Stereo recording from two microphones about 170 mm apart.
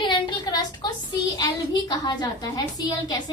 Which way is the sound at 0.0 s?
25° left (ahead or behind).